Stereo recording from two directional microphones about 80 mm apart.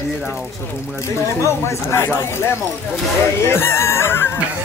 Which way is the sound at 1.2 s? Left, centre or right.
Left.